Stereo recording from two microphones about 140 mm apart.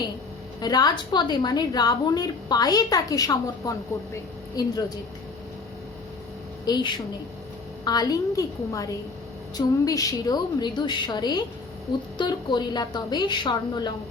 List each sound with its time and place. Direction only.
0.6 s a woman's voice: 30° left (ahead or behind)
6.7 s a woman's voice: 30° left (ahead or behind)